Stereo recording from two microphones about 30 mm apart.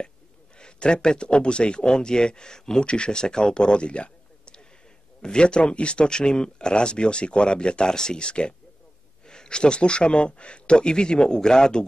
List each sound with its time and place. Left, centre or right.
0.6 s speech: left
2.9 s speech: left